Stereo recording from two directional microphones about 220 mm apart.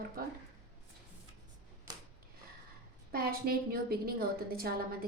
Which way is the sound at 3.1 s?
45° right (ahead or behind).